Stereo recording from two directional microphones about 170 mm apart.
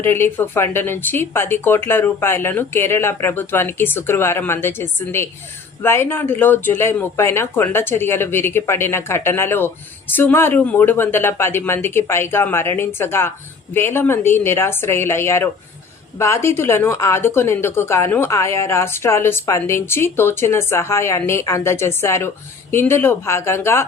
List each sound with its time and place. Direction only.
0.0 s speech: 15° left (ahead or behind)